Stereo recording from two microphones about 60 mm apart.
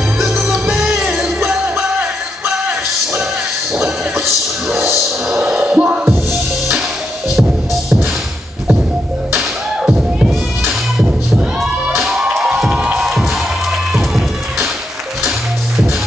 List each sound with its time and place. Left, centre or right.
0.4 s music: centre
1.8 s music: right
4.7 s music: right
5.5 s music: right
9.8 s music: centre
12.0 s music: centre